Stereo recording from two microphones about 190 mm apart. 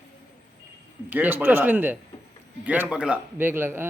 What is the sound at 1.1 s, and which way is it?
A man's voice, 10° right (ahead or behind).